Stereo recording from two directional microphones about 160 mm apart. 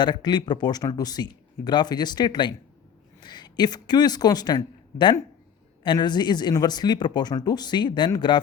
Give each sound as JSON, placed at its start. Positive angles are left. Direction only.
{"t": 0.0, "sound": "speech", "side_deg": 25}